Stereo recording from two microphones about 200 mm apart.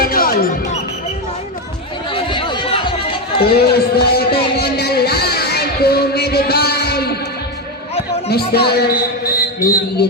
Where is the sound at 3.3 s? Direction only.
25° left (ahead or behind).